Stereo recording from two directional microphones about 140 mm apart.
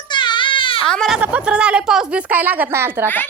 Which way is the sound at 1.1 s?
10° right (ahead or behind).